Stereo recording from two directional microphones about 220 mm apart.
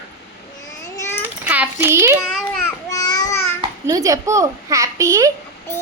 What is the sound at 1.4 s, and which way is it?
Speech, 10° right (ahead or behind).